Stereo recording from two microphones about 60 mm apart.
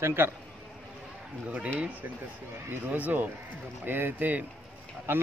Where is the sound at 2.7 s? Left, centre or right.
Right.